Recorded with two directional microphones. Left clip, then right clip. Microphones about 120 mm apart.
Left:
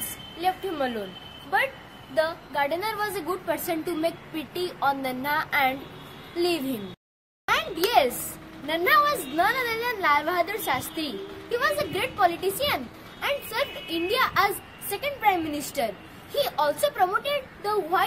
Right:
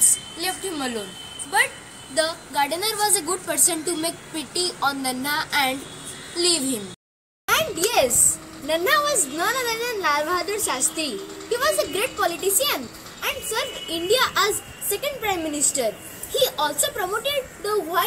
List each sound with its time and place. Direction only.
2.1 s a woman's voice: 25° left (ahead or behind)
7.4 s a sound: 35° left (ahead or behind)
8.6 s a woman's voice: 35° left (ahead or behind)